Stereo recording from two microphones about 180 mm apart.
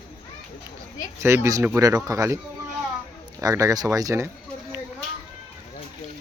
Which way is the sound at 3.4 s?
20° right (ahead or behind).